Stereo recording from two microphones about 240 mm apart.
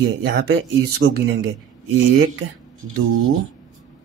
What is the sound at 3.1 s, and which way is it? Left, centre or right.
Speech, right.